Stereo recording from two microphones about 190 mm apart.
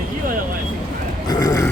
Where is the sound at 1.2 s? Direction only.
20° left (ahead or behind).